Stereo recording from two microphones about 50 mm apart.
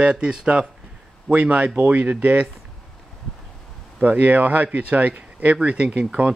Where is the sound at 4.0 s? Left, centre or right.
Right.